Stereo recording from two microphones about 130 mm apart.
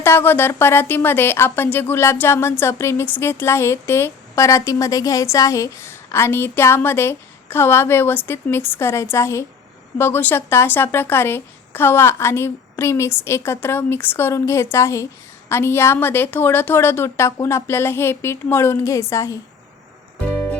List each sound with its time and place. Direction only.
0.0 s a woman's voice: 15° left (ahead or behind)